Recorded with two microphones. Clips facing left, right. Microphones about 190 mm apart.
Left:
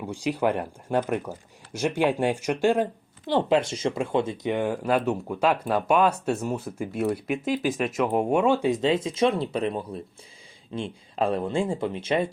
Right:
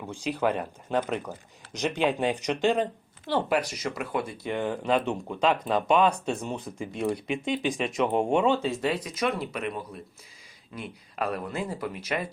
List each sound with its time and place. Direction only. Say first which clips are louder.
0.0 s speech: left 2 dB; 15° left (ahead or behind)